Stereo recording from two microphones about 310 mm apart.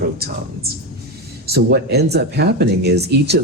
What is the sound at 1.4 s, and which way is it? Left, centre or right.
Speech, right.